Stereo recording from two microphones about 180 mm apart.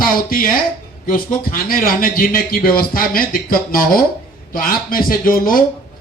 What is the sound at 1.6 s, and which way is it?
A man's voice, 50° left (ahead or behind).